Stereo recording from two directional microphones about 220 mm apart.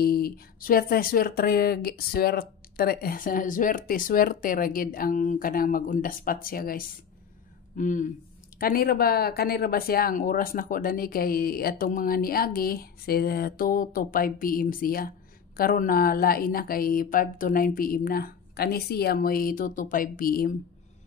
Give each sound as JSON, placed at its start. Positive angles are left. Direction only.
{"t": 0.0, "sound": "speech", "side_deg": 45}